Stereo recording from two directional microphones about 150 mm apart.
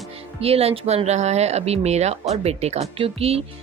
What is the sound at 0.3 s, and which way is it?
Speech, 40° right (ahead or behind).